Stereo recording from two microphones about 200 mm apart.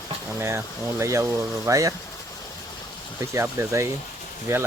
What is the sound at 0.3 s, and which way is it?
Speech, 10° right (ahead or behind).